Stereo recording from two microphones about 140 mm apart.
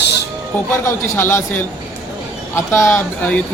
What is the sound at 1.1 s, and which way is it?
Speech, 15° left (ahead or behind).